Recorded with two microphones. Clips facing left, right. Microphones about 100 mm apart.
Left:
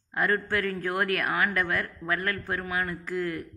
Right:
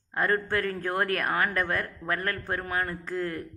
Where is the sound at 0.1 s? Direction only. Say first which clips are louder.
Even; 35° right (ahead or behind).